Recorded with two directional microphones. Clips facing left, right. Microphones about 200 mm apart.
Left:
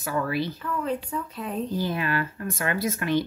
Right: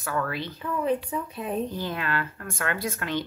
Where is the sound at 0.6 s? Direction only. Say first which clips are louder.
Right 2 dB; 15° right (ahead or behind).